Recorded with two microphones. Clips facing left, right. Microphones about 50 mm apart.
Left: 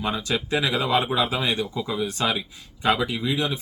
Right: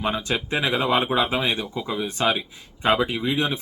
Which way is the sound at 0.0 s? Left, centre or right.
Right.